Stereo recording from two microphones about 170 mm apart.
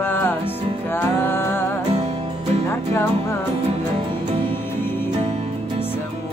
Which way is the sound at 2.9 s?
15° left (ahead or behind).